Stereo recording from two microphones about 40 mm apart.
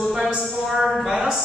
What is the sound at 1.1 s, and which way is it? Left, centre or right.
Speech, right.